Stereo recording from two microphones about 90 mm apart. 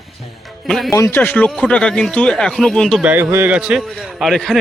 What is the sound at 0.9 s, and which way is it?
Speech, 30° left (ahead or behind).